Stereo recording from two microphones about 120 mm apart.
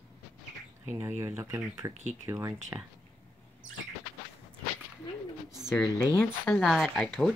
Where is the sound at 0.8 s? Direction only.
20° right (ahead or behind).